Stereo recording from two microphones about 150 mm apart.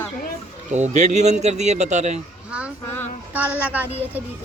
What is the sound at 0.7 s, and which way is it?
Speech, 50° right (ahead or behind).